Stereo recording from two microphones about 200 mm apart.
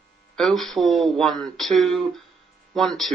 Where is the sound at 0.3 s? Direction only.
Centre (ahead or behind).